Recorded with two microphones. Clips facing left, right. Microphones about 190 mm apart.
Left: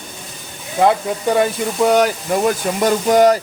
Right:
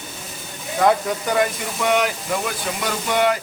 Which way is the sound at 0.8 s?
30° left (ahead or behind).